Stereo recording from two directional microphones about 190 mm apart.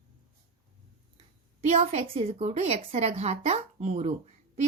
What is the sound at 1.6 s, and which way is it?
Speech, 35° right (ahead or behind).